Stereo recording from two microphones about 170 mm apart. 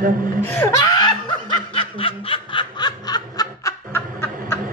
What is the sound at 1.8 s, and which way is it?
Snicker, 30° left (ahead or behind).